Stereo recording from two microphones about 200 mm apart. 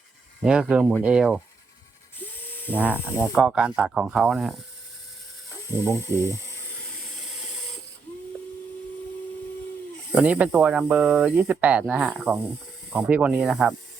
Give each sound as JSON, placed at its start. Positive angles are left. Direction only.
{"t": 0.4, "sound": "speech", "side_deg": -5}
{"t": 2.2, "sound": "electric toothbrush", "side_deg": 10}
{"t": 3.3, "sound": "speech", "side_deg": -5}
{"t": 5.8, "sound": "speech", "side_deg": 15}
{"t": 10.2, "sound": "speech", "side_deg": -5}